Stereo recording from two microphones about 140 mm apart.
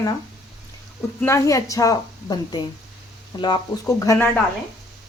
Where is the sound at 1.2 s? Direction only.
20° left (ahead or behind).